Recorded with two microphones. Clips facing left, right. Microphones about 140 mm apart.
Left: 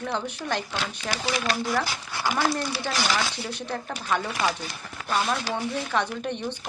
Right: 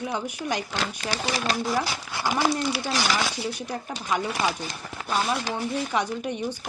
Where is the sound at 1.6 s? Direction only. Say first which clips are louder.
Right 1 dB; 20° right (ahead or behind).